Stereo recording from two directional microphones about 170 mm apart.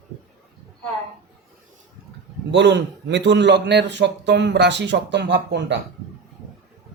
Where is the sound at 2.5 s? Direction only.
90° right.